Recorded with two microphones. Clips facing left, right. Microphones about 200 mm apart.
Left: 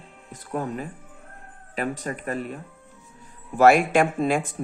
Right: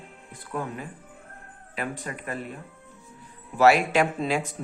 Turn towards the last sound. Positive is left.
turn(degrees=50)  # may be behind; listen again after turning